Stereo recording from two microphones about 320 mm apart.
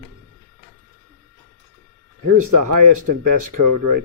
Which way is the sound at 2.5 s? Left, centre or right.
Right.